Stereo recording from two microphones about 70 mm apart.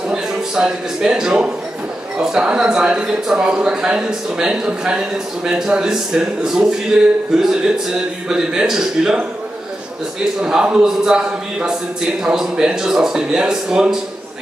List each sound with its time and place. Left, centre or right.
0.1 s a man's voice: centre
10.4 s speech: centre